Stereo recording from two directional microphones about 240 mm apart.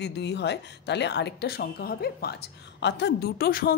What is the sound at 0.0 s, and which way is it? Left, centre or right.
A woman's voice, left.